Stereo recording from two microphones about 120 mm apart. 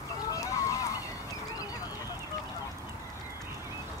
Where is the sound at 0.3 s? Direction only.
25° left (ahead or behind).